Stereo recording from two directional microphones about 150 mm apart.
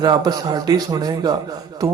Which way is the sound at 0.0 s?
25° right (ahead or behind).